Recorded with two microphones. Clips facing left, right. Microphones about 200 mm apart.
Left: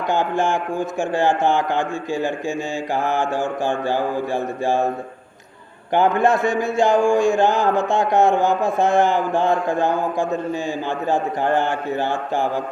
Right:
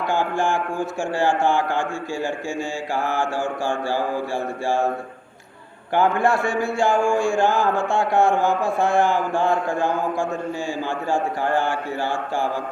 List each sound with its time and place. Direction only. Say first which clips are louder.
0.1 s a man's voice: left 3 dB; 20° left (ahead or behind)
5.9 s a man's voice: left 2 dB; 20° left (ahead or behind)